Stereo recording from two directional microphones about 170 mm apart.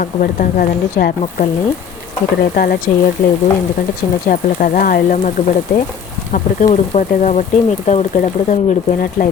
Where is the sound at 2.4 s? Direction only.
60° left (ahead or behind).